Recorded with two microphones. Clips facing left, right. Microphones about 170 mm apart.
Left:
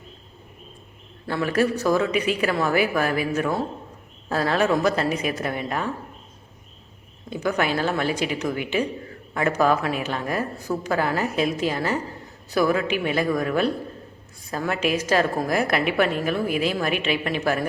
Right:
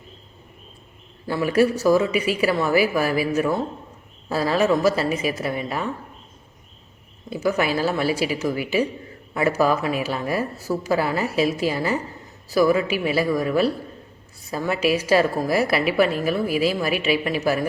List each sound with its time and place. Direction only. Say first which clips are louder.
1.3 s a woman's voice: right 3 dB; 10° right (ahead or behind)
7.3 s a woman's voice: right 2 dB; 5° right (ahead or behind)